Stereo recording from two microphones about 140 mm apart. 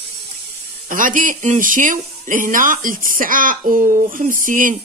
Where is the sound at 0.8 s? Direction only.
70° right (ahead or behind).